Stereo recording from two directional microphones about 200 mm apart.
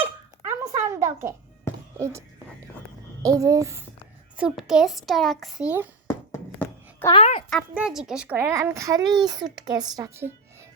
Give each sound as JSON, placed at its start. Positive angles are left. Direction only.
{"t": 0.0, "sound": "a sound", "side_deg": -15}
{"t": 3.2, "sound": "a child's voice", "side_deg": -15}
{"t": 4.4, "sound": "a child's voice", "side_deg": -5}
{"t": 6.1, "sound": "a sound", "side_deg": 15}
{"t": 7.1, "sound": "a woman's voice", "side_deg": 30}
{"t": 7.5, "sound": "a child's voice", "side_deg": -5}